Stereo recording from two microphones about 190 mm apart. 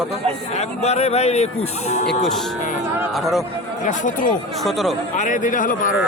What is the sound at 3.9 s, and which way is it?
Speech, 45° left (ahead or behind).